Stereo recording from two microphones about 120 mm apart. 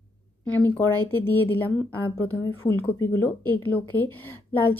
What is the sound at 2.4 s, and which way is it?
Speech, 20° left (ahead or behind).